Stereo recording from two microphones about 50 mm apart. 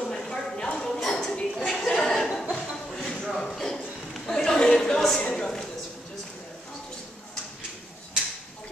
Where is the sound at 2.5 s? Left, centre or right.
Centre.